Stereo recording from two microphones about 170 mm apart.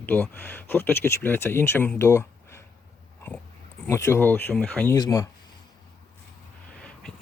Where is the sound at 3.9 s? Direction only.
15° left (ahead or behind).